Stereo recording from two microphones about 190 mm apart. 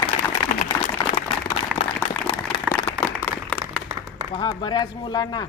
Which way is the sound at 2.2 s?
30° left (ahead or behind).